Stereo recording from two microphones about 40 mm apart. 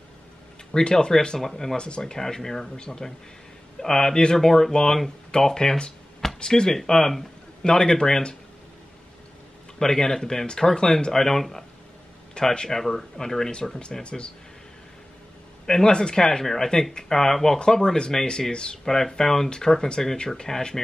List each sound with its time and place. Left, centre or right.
0.7 s speech: centre
1.4 s speech: centre
1.8 s speech: left; by 7.2 s centre
7.6 s speech: centre
9.8 s speech: centre
14.0 s speech: left
15.6 s speech: centre
17.7 s speech: centre
18.9 s speech: centre